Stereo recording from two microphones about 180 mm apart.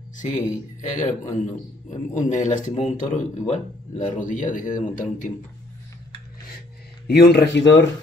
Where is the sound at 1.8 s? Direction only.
40° left (ahead or behind).